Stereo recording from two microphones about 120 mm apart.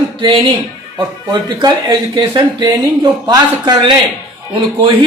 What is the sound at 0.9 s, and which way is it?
Speech, 35° right (ahead or behind).